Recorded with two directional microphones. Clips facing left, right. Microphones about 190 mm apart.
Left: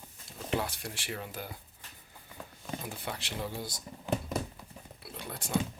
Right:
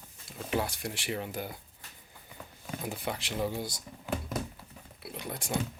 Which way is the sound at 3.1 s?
15° right (ahead or behind).